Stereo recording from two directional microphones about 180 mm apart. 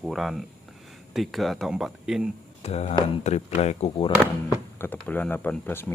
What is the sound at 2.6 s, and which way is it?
Speech, 35° left (ahead or behind).